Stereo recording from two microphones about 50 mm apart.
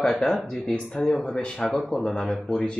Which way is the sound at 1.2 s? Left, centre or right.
Centre.